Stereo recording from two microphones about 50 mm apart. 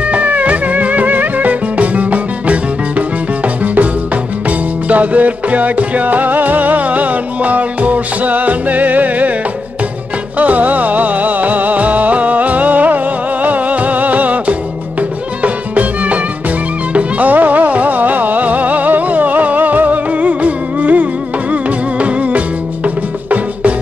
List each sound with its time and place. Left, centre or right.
0.1 s music: right
3.6 s music: right
10.4 s music: right